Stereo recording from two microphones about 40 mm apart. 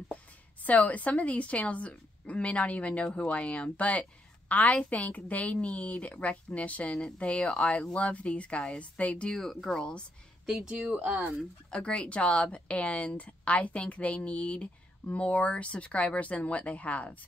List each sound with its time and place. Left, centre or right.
0.7 s a woman's voice: left
9.3 s speech: centre
9.8 s speech: left
10.4 s speech: centre
10.7 s speech: right
11.0 s speech: right
11.7 s a woman's voice: left